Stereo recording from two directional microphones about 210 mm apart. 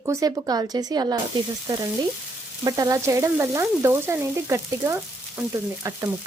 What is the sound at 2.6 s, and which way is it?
Frying, 15° right (ahead or behind).